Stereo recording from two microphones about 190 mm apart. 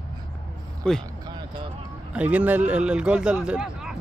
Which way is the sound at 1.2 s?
20° right (ahead or behind).